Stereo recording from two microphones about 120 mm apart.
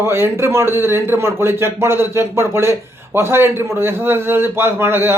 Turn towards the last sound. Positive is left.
turn(degrees=-20)  # may be behind; listen again after turning